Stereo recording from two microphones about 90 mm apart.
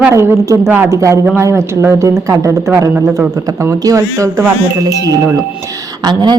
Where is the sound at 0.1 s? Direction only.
35° right (ahead or behind).